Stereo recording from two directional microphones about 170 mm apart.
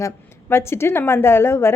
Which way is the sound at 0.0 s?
15° left (ahead or behind).